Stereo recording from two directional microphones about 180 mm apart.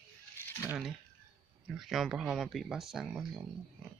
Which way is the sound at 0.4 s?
15° left (ahead or behind).